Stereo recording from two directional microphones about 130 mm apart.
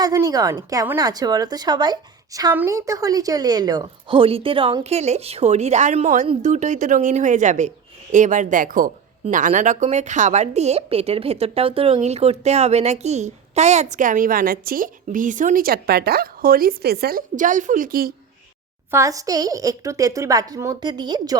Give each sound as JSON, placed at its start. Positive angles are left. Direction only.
{"t": 0.0, "sound": "a woman's voice", "side_deg": -25}
{"t": 2.5, "sound": "a woman's voice", "side_deg": -20}
{"t": 4.2, "sound": "a woman's voice", "side_deg": -45}
{"t": 9.3, "sound": "a woman's voice", "side_deg": -80}
{"t": 17.2, "sound": "a woman's voice", "side_deg": -80}
{"t": 18.9, "sound": "a woman's voice", "side_deg": -25}